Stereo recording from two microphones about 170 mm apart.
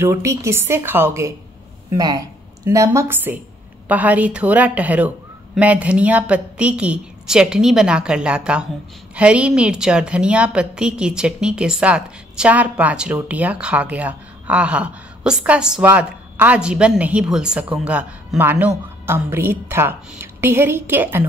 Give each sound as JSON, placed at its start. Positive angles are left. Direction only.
{"t": 0.0, "sound": "a woman's voice", "side_deg": -15}